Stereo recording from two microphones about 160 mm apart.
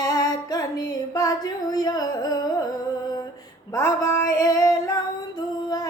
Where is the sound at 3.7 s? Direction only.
20° left (ahead or behind).